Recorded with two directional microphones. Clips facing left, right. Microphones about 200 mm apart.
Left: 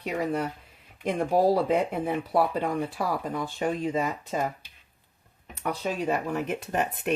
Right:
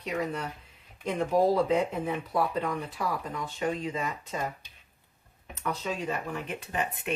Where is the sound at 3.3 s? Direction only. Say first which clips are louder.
Left 3 dB; 35° left (ahead or behind).